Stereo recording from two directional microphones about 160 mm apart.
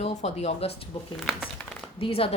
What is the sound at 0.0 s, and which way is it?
Speech, 45° left (ahead or behind).